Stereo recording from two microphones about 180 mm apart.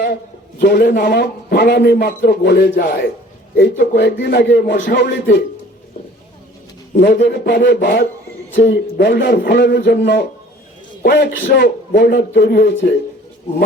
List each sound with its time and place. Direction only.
0.6 s a man's voice: 60° left (ahead or behind)
3.5 s a man's voice: 65° left (ahead or behind)
6.9 s a man's voice: 75° left (ahead or behind)
11.0 s a man's voice: 60° left (ahead or behind)